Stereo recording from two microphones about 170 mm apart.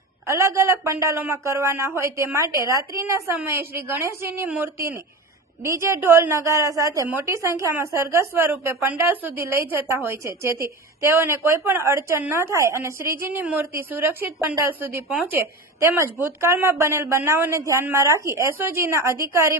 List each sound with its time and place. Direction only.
0.3 s a woman's voice: 15° right (ahead or behind)